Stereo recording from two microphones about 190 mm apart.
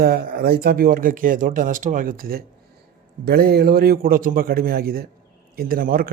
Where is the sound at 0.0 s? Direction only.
55° right (ahead or behind).